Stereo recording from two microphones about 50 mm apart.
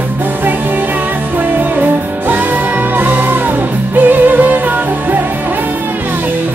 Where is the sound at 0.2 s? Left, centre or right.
Right.